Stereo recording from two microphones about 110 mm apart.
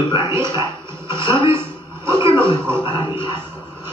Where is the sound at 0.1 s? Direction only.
25° right (ahead or behind).